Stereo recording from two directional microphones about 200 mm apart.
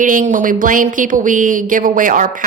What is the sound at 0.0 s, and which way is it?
Speech, 40° right (ahead or behind).